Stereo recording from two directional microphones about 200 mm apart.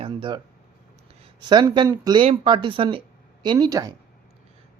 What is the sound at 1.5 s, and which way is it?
Speech, 20° right (ahead or behind).